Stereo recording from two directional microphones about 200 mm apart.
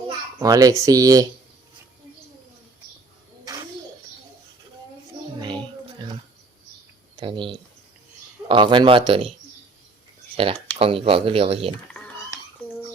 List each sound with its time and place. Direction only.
0.3 s speech: 20° right (ahead or behind)
5.4 s a sound: 25° right (ahead or behind)
7.2 s speech: 25° right (ahead or behind)
10.3 s speech: 30° right (ahead or behind)